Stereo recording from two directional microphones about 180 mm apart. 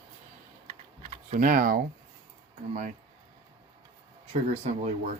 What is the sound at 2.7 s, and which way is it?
Speech, 40° right (ahead or behind).